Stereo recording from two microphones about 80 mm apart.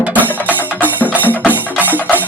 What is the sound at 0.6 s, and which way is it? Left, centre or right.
Music, right.